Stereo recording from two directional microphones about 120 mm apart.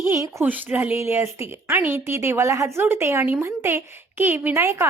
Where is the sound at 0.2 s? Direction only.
25° right (ahead or behind).